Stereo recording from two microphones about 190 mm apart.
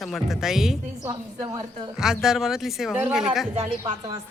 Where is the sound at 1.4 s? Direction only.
20° right (ahead or behind).